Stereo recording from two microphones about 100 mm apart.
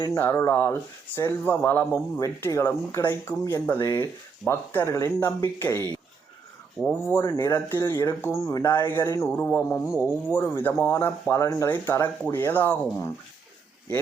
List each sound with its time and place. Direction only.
0.1 s speech: 30° left (ahead or behind)
6.8 s speech: 20° left (ahead or behind)
9.9 s speech: 5° right (ahead or behind)
10.2 s speech: 20° left (ahead or behind)